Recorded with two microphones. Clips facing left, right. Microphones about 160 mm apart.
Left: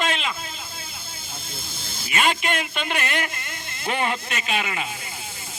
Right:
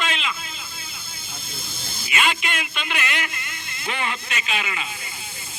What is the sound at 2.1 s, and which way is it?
Speech, 45° left (ahead or behind).